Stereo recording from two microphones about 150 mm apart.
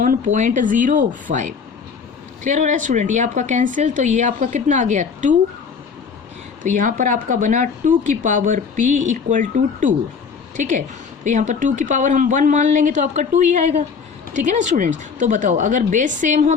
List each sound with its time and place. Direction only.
0.0 s speech: 60° right (ahead or behind)
6.6 s speech: 60° right (ahead or behind)